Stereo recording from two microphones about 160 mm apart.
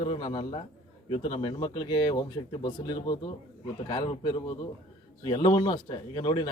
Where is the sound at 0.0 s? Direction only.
30° left (ahead or behind).